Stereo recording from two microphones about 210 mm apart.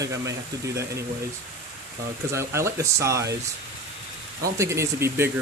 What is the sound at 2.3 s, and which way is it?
Speech, 15° right (ahead or behind).